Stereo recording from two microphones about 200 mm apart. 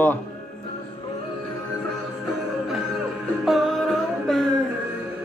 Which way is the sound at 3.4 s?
Centre (ahead or behind).